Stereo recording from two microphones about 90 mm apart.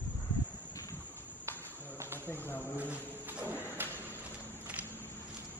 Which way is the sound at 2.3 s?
25° left (ahead or behind).